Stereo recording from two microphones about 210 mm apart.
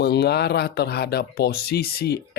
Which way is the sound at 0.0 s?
50° left (ahead or behind).